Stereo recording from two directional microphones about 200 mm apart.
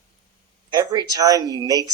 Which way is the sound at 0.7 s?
20° right (ahead or behind).